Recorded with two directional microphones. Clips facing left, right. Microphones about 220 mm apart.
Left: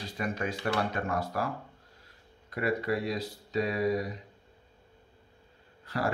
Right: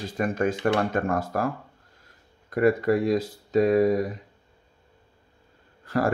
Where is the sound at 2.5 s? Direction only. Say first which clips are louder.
Right 9 dB; 50° right (ahead or behind).